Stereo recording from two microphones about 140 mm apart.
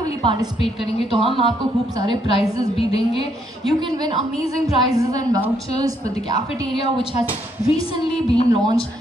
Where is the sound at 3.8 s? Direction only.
30° right (ahead or behind).